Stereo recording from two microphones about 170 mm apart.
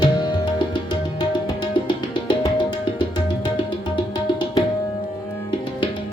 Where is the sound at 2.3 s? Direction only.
30° left (ahead or behind).